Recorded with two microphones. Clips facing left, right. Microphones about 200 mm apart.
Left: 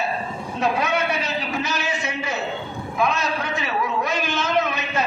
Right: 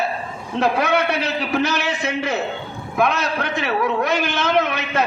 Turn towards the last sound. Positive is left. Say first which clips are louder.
# right 3 dB
turn(degrees=-65)  # may be behind; listen again after turning